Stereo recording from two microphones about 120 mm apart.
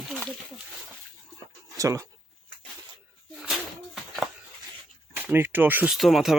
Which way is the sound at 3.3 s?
Centre (ahead or behind).